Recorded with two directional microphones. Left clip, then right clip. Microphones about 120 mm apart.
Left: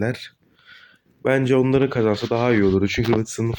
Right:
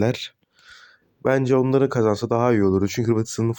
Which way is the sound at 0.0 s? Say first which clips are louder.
Right 3 dB; 50° right (ahead or behind).